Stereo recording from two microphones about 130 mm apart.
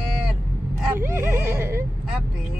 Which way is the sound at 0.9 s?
20° right (ahead or behind).